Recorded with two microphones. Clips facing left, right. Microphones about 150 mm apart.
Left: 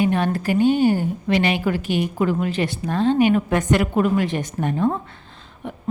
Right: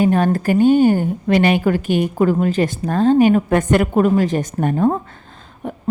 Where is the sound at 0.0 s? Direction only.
45° right (ahead or behind).